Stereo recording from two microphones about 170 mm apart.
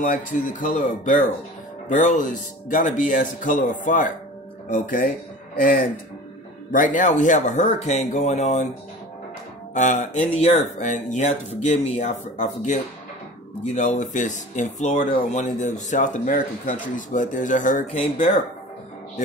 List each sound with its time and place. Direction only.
0.0 s speech: 55° left (ahead or behind)
9.8 s speech: 50° left (ahead or behind)